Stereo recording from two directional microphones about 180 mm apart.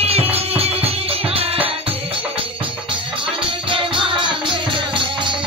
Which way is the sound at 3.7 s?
30° right (ahead or behind).